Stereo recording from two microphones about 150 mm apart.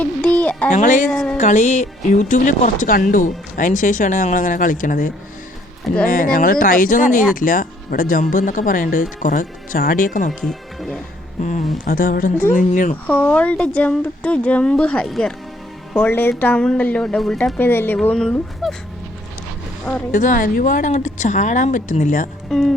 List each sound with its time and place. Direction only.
0.0 s a sound: 10° left (ahead or behind)
0.7 s speech: 55° left (ahead or behind)
1.1 s music: centre (ahead or behind)
1.4 s speech: 55° left (ahead or behind)
10.4 s speech: centre (ahead or behind)
11.3 s speech: 55° left (ahead or behind)
11.9 s speech: 70° left (ahead or behind)
13.1 s speech: 10° left (ahead or behind)
20.1 s speech: 60° left (ahead or behind)
22.4 s speech: centre (ahead or behind)